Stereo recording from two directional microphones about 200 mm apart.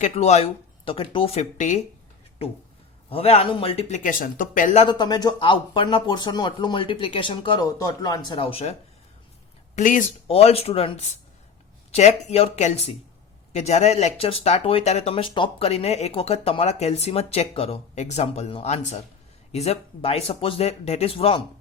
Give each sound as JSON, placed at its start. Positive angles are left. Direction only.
{"t": 0.0, "sound": "speech", "side_deg": 30}
{"t": 3.1, "sound": "speech", "side_deg": 30}
{"t": 4.9, "sound": "speech", "side_deg": 20}
{"t": 9.7, "sound": "speech", "side_deg": 40}